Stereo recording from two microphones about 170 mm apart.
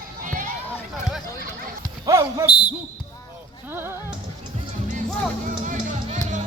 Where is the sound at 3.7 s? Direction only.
10° right (ahead or behind).